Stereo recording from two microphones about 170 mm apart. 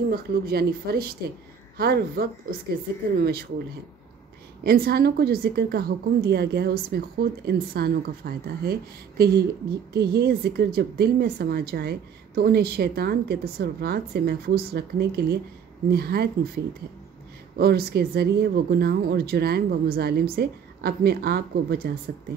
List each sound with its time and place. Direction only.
0.1 s a woman's voice: 65° right (ahead or behind)
4.6 s a woman's voice: 65° right (ahead or behind)
9.9 s speech: 70° right (ahead or behind)